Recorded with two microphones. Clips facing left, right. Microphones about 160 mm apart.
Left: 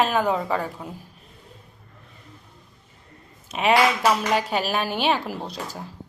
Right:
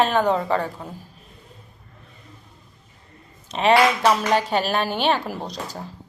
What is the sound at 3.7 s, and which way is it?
Speech, 5° left (ahead or behind).